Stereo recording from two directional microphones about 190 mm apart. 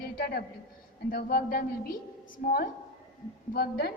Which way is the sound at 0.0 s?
55° left (ahead or behind).